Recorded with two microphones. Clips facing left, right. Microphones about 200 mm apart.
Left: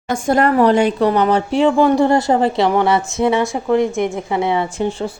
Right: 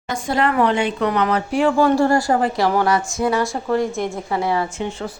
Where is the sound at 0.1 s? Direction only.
45° left (ahead or behind).